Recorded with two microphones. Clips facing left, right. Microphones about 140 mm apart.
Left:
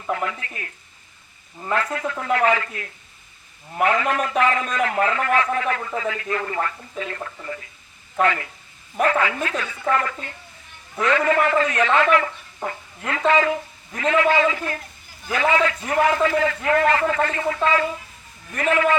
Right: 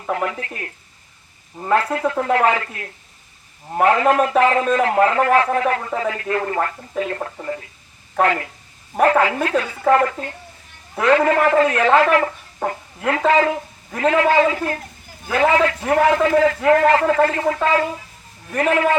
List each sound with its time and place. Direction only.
0.1 s a man's voice: 45° right (ahead or behind)
3.8 s a man's voice: 40° right (ahead or behind)
11.9 s a man's voice: 40° right (ahead or behind)